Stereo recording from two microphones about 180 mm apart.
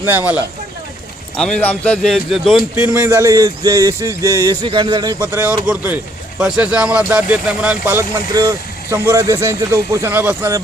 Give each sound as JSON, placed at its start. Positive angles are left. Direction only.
{"t": 0.0, "sound": "speech", "side_deg": -10}
{"t": 1.4, "sound": "speech", "side_deg": 5}
{"t": 2.7, "sound": "speech", "side_deg": -10}
{"t": 5.2, "sound": "speech", "side_deg": -10}